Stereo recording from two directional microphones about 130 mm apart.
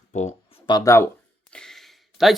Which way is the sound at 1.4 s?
5° left (ahead or behind).